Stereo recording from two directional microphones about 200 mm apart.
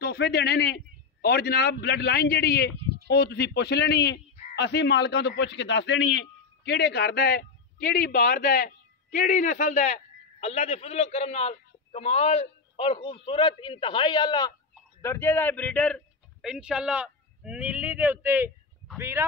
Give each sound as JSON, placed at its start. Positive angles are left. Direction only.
{"t": 0.0, "sound": "a man's voice", "side_deg": 55}